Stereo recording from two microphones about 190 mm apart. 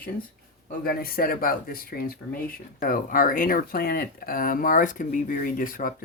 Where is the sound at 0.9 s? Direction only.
50° left (ahead or behind).